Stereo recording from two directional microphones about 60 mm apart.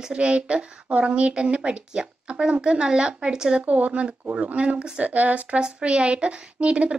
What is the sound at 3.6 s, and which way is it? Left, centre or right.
A woman's voice, right.